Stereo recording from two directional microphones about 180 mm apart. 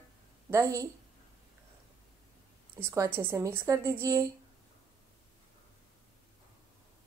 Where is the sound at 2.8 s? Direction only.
15° right (ahead or behind).